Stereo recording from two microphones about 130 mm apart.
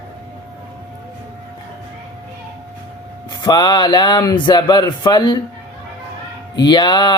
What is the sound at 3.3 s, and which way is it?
Speech, 30° left (ahead or behind).